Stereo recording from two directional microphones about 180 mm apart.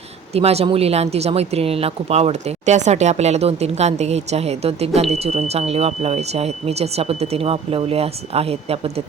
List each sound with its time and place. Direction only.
0.3 s speech: 35° right (ahead or behind)